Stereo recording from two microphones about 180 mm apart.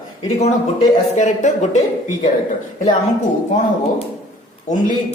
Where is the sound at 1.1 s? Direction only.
40° left (ahead or behind).